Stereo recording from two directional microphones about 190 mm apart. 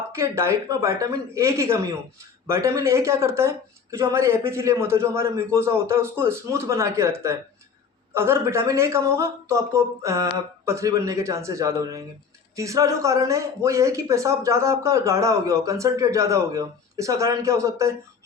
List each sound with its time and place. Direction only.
0.1 s speech: 15° right (ahead or behind)